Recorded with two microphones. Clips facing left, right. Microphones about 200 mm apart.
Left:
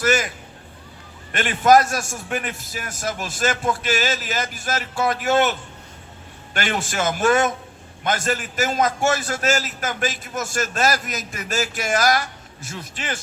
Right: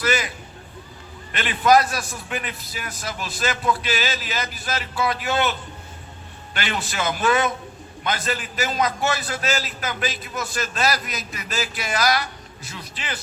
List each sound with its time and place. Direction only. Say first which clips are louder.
0.0 s a man's voice: left 3 dB; 45° left (ahead or behind)
1.3 s a man's voice: left 2 dB; 45° left (ahead or behind)